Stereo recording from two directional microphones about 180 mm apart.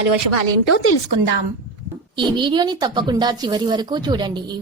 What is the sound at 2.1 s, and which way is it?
A woman's voice, 25° right (ahead or behind).